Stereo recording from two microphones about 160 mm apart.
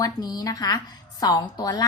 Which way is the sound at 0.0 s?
25° left (ahead or behind).